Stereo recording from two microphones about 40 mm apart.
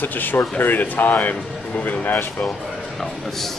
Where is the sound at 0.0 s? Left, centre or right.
Left.